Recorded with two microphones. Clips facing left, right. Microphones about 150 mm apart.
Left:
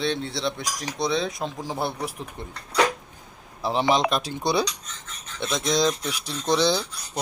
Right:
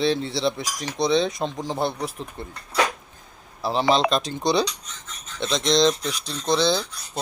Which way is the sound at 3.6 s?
15° left (ahead or behind).